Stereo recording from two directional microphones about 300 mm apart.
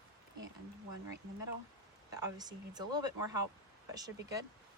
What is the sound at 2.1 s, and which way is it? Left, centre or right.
Speech, centre.